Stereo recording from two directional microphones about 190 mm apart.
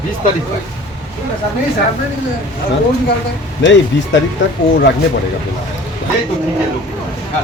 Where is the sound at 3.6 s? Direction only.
70° left (ahead or behind).